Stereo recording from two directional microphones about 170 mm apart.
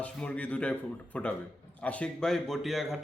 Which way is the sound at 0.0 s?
5° left (ahead or behind).